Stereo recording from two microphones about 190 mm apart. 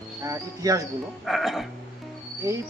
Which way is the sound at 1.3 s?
Centre (ahead or behind).